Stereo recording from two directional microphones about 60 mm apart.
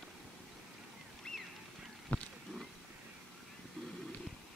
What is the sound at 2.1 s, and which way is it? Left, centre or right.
Wild animals, left.